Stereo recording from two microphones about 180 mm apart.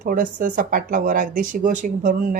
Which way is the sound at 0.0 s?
50° right (ahead or behind).